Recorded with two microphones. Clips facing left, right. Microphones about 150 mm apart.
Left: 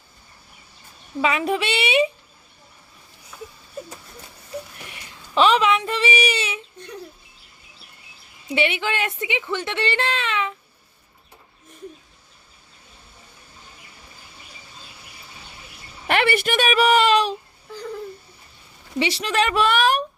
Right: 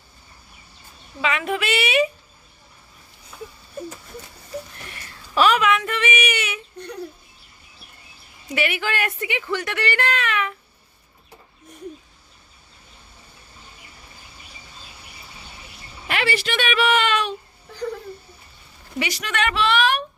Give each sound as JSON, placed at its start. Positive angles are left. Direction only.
{"t": 1.2, "sound": "speech", "side_deg": 35}
{"t": 4.8, "sound": "a sound", "side_deg": 15}
{"t": 8.5, "sound": "speech", "side_deg": 25}
{"t": 16.1, "sound": "a woman's voice", "side_deg": 55}
{"t": 18.9, "sound": "a woman's voice", "side_deg": 30}
{"t": 19.6, "sound": "child singing", "side_deg": 40}